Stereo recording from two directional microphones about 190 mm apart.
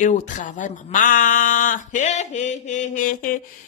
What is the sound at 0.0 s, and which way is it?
A man's voice, 40° left (ahead or behind).